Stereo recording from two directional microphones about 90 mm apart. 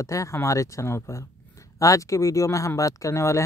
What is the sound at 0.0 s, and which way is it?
Speech, 35° left (ahead or behind).